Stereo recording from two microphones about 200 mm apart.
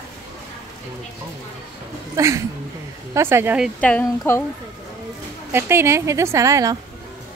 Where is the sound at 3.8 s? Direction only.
5° left (ahead or behind).